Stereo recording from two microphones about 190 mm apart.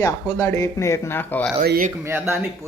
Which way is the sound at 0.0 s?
15° left (ahead or behind).